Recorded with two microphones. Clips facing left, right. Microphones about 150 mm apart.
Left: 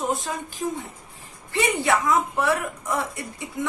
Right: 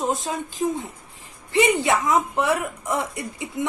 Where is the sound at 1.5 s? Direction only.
20° right (ahead or behind).